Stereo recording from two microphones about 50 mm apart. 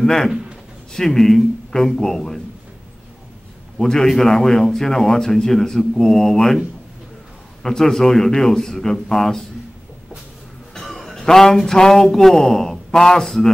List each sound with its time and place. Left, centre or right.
0.0 s a man's voice: centre
0.3 s a man's voice: centre
0.9 s a man's voice: centre
3.7 s a man's voice: centre
7.6 s a man's voice: centre
10.7 s a sound: centre